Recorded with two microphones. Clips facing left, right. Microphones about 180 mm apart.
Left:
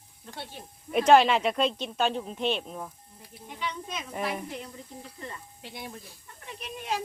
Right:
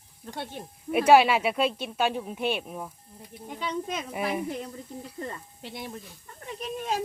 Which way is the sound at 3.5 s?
45° right (ahead or behind).